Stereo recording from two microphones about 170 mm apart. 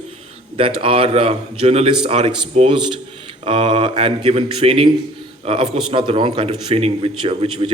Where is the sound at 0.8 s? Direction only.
30° right (ahead or behind).